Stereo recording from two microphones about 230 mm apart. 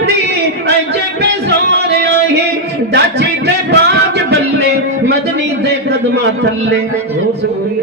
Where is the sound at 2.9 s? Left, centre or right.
Right.